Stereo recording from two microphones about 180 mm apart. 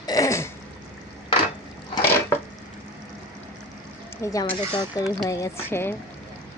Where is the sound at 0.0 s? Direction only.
20° left (ahead or behind).